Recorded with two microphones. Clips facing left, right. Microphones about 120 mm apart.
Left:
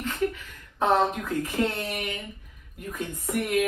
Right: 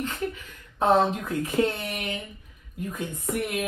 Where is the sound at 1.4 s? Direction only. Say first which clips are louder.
Right 4 dB; 15° right (ahead or behind).